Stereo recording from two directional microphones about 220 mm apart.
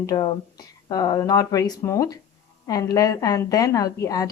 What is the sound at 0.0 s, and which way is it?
Speech, 15° left (ahead or behind).